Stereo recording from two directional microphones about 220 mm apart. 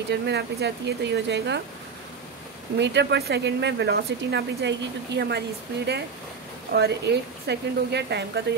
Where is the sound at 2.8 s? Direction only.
50° right (ahead or behind).